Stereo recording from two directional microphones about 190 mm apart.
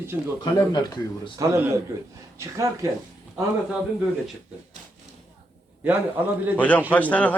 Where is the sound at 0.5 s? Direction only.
20° left (ahead or behind).